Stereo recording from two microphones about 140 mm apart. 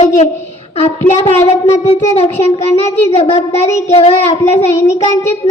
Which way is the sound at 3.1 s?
45° left (ahead or behind).